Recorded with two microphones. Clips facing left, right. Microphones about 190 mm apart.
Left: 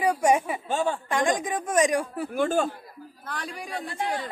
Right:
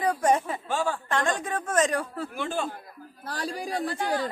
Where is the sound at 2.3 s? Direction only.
45° left (ahead or behind).